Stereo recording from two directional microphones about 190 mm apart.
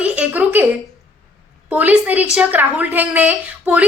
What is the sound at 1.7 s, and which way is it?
A woman's voice, 10° right (ahead or behind).